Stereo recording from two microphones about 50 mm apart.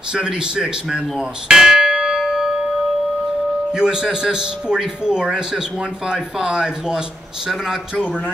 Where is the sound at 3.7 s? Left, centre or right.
Centre.